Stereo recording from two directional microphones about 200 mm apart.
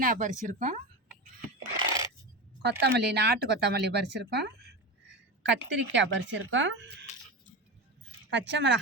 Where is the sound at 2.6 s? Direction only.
55° right (ahead or behind).